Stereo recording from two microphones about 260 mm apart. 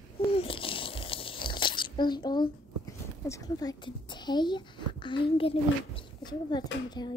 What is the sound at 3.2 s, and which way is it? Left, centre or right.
A child's voice, centre.